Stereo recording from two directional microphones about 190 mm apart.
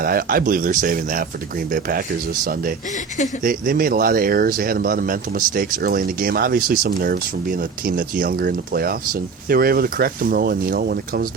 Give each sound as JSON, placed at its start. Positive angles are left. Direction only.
{"t": 0.0, "sound": "speech", "side_deg": -50}